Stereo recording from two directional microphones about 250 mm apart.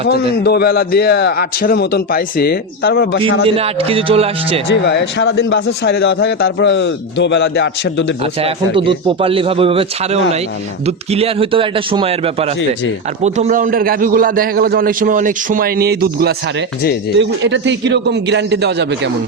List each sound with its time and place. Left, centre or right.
0.0 s a man's voice: left
3.4 s a man's voice: right
4.7 s a man's voice: left
8.2 s a man's voice: right